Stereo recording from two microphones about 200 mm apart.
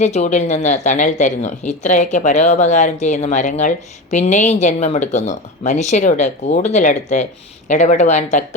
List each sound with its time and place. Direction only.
0.0 s speech: 35° left (ahead or behind)